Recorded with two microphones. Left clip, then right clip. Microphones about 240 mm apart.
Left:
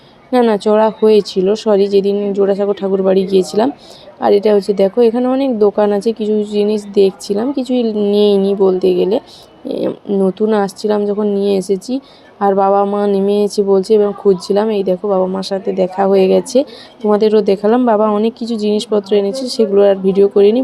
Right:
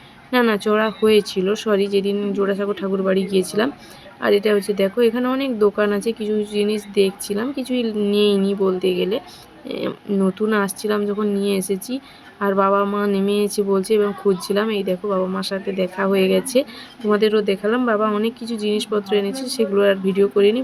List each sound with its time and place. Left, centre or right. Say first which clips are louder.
0.3 s speech: left 6 dB; centre